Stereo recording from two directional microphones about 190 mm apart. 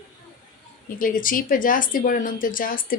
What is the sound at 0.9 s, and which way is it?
Speech, 45° left (ahead or behind).